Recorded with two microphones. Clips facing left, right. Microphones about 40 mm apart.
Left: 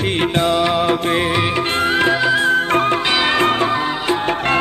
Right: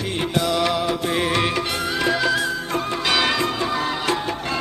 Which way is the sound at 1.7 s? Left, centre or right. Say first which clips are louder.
Left 7 dB; left.